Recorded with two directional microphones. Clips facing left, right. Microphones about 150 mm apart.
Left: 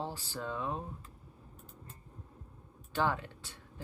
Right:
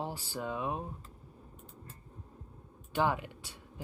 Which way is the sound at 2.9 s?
15° right (ahead or behind).